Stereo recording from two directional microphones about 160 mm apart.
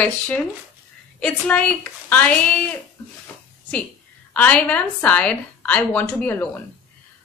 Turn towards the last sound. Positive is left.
turn(degrees=10)  # may be behind; listen again after turning